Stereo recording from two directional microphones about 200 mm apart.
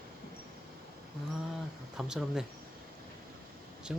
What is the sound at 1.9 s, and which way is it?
Speech, 5° right (ahead or behind).